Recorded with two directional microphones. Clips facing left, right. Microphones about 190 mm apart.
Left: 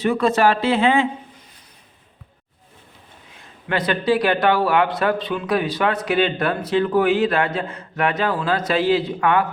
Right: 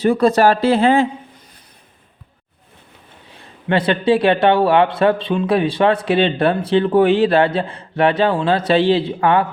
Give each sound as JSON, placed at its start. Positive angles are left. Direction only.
{"t": 0.0, "sound": "speech", "side_deg": -35}
{"t": 3.3, "sound": "a man's voice", "side_deg": -30}